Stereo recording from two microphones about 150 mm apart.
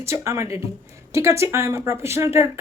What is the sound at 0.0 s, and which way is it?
Speech, 20° right (ahead or behind).